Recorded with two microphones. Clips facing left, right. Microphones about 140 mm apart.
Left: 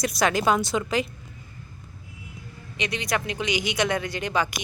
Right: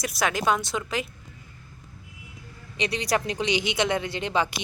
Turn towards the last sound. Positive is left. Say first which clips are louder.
# even
turn(degrees=-25)  # may be behind; listen again after turning